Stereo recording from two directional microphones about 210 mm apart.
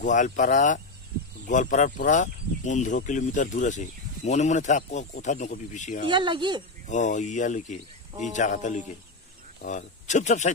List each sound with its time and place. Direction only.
0.0 s speech: 35° left (ahead or behind)
6.0 s speech: 20° right (ahead or behind)
6.9 s speech: 35° left (ahead or behind)